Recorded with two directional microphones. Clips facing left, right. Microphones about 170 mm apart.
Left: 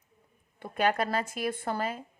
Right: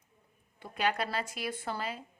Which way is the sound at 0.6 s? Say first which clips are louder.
Left 4 dB; 50° left (ahead or behind).